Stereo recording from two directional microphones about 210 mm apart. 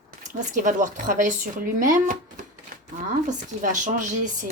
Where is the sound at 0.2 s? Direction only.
35° right (ahead or behind).